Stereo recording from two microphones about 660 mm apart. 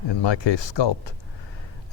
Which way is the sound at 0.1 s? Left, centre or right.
Left.